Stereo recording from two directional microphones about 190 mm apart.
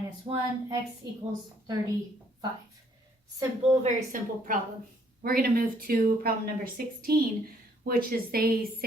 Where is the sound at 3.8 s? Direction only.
45° right (ahead or behind).